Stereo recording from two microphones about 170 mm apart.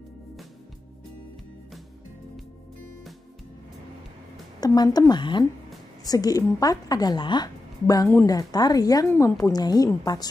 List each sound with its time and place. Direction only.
4.6 s a woman's voice: 20° left (ahead or behind)